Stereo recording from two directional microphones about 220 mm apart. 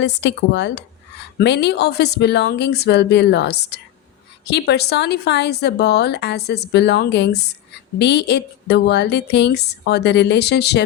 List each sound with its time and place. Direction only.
0.0 s speech: 55° left (ahead or behind)